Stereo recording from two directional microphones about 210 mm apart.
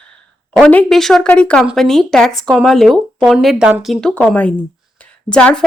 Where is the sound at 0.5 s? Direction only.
5° left (ahead or behind).